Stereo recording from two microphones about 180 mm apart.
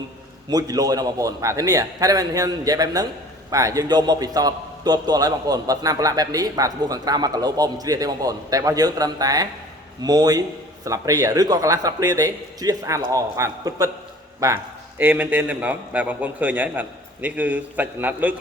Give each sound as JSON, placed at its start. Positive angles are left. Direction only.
{"t": 0.5, "sound": "a man's voice", "side_deg": -20}